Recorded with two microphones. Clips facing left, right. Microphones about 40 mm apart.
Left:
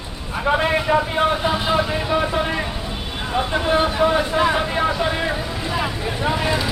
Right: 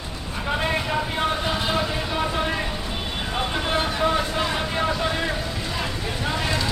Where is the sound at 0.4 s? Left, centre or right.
Left.